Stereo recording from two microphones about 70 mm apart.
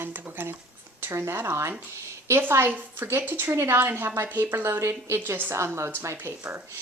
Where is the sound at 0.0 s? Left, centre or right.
Right.